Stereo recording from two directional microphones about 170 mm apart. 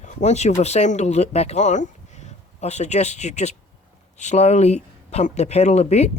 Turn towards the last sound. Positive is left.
turn(degrees=40)  # may be behind; listen again after turning